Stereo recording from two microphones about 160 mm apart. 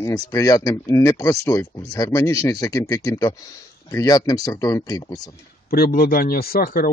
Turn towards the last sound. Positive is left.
turn(degrees=65)  # may be behind; listen again after turning